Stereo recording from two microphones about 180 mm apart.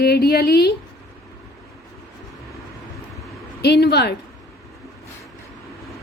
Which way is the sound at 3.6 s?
65° left (ahead or behind).